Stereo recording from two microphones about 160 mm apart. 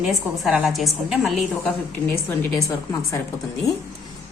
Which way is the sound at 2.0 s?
15° left (ahead or behind).